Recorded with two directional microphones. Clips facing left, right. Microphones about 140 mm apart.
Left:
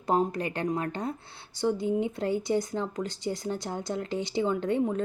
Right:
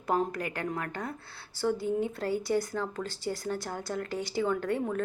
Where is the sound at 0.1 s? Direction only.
25° left (ahead or behind).